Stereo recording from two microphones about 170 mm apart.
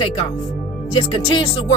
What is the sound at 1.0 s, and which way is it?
Speech, 30° left (ahead or behind).